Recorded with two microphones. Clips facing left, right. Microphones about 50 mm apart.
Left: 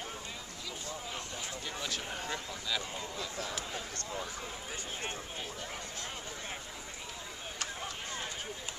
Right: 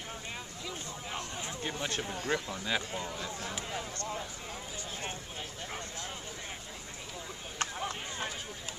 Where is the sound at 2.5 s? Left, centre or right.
Right.